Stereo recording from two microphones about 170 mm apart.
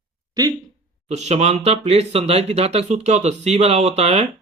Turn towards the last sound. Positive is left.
turn(degrees=-40)  # may be behind; listen again after turning